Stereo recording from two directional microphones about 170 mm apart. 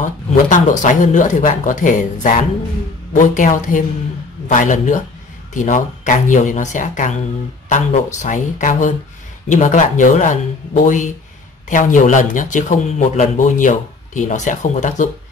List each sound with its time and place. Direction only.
0.0 s a man's voice: 50° left (ahead or behind)